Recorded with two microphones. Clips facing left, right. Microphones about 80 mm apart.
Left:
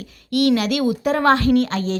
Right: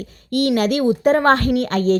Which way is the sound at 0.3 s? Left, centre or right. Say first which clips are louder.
Even; right.